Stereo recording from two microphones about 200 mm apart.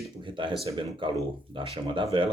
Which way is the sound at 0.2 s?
25° right (ahead or behind).